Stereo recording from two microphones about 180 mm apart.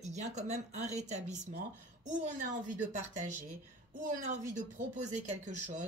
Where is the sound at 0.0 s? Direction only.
40° right (ahead or behind).